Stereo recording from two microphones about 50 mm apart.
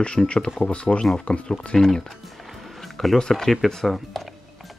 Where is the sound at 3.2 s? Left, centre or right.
Centre.